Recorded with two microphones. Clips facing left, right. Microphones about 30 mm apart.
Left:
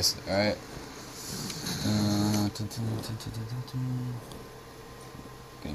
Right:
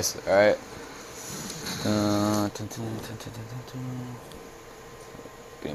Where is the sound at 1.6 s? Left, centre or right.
Right.